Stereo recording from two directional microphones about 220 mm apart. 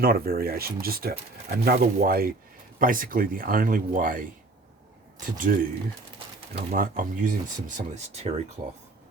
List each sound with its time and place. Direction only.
0.0 s speech: 45° right (ahead or behind)
6.7 s speech: 40° right (ahead or behind)